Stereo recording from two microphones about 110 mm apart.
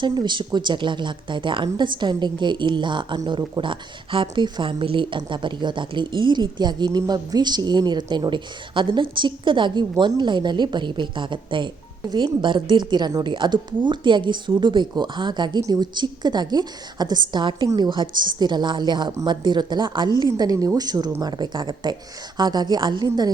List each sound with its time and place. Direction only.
0.0 s a woman's voice: 45° right (ahead or behind)